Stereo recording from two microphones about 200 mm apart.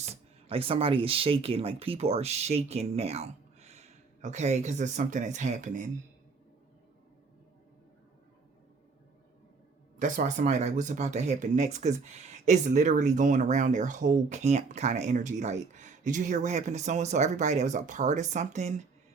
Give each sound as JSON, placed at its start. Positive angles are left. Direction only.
{"t": 0.0, "sound": "speech", "side_deg": -30}
{"t": 10.0, "sound": "speech", "side_deg": -40}